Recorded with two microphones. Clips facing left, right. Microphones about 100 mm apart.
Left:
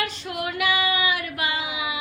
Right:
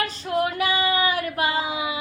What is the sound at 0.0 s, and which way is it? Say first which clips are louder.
Child singing: right 5 dB; 35° right (ahead or behind).